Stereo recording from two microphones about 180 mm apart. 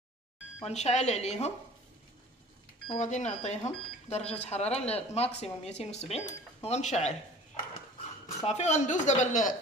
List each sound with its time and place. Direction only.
0.7 s speech: 40° left (ahead or behind)
3.0 s speech: 40° left (ahead or behind)
8.4 s a woman's voice: 35° left (ahead or behind)